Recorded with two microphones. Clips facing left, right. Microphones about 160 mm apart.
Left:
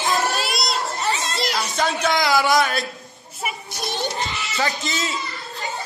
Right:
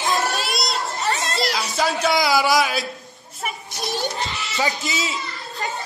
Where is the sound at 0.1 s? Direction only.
Centre (ahead or behind).